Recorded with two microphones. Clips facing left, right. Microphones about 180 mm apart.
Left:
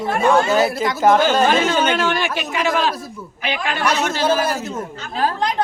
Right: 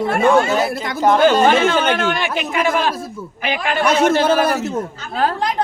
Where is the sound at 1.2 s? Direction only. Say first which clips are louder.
Right 3 dB; 55° right (ahead or behind).